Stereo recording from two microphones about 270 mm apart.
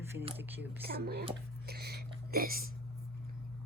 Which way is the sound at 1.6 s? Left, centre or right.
Right.